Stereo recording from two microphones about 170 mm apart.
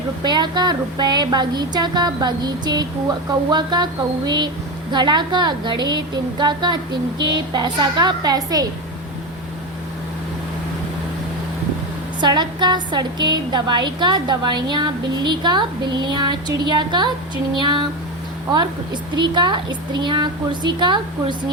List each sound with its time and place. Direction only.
0.2 s a woman's voice: 25° right (ahead or behind)
4.9 s a woman's voice: 25° right (ahead or behind)
12.2 s a woman's voice: 25° right (ahead or behind)
19.1 s a woman's voice: 25° right (ahead or behind)